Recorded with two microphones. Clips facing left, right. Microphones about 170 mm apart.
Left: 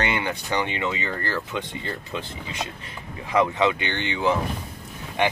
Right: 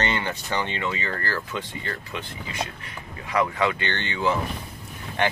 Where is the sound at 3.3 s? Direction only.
20° left (ahead or behind).